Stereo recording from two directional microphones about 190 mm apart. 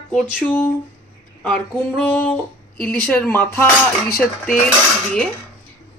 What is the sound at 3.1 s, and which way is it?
Speech, 10° left (ahead or behind).